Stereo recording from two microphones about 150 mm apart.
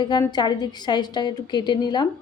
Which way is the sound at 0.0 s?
30° left (ahead or behind).